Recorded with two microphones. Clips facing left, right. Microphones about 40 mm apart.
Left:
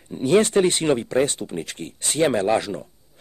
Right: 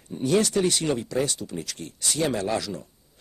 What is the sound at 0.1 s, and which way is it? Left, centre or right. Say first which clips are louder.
Speech: left 5 dB; left.